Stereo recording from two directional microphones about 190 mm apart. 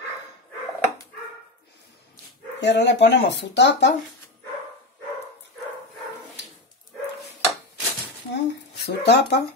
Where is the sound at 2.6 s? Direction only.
65° left (ahead or behind).